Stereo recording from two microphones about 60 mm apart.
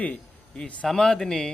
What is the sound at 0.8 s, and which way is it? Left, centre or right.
Speech, centre.